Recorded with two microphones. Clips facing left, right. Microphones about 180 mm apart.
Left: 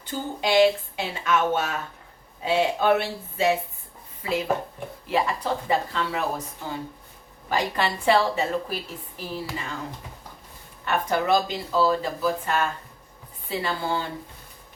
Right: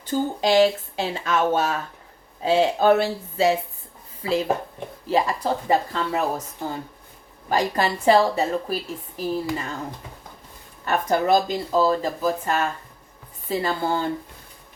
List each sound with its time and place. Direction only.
0.1 s a woman's voice: 40° right (ahead or behind)
7.5 s a woman's voice: 40° right (ahead or behind)
10.8 s a woman's voice: 40° right (ahead or behind)